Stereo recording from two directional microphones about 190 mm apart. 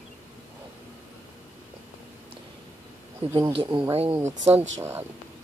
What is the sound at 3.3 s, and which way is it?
Speech, 25° right (ahead or behind).